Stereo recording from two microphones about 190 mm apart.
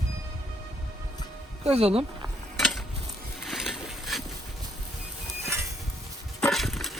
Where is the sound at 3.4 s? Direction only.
Centre (ahead or behind).